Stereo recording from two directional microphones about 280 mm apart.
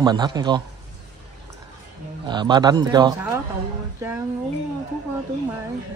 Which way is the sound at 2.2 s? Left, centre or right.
Centre.